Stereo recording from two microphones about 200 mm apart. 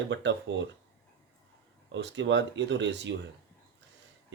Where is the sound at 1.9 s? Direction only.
65° right (ahead or behind).